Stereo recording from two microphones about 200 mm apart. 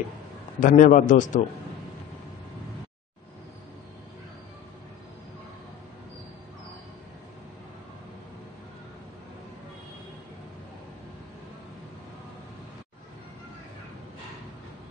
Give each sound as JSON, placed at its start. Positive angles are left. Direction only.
{"t": 0.6, "sound": "a man's voice", "side_deg": 40}